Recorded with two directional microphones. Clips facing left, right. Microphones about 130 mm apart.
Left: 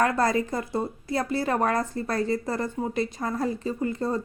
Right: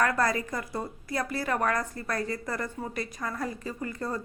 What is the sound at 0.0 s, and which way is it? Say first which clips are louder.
A woman's voice: left 3 dB; 25° left (ahead or behind).